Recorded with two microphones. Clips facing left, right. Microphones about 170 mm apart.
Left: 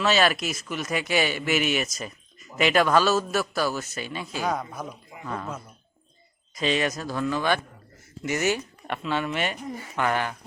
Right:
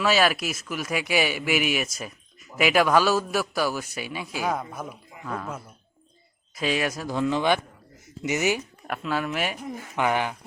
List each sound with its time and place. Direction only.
0.0 s a man's voice: 5° right (ahead or behind)
7.2 s a man's voice: 20° right (ahead or behind)
8.9 s speech: 5° right (ahead or behind)
9.9 s a man's voice: 15° right (ahead or behind)